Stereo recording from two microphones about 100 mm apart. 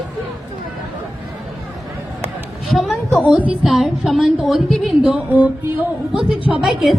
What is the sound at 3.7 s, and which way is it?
A woman's voice, 5° right (ahead or behind).